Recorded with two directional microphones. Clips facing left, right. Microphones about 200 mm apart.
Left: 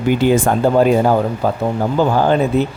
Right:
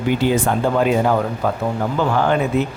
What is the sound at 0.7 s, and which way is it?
Speech, 35° left (ahead or behind).